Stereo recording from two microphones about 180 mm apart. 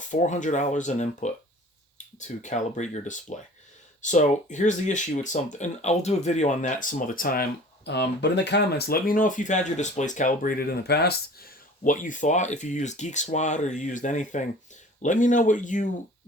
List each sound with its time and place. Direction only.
0.1 s speech: 40° left (ahead or behind)
7.9 s speech: 70° left (ahead or behind); by 15.9 s 45° left (ahead or behind)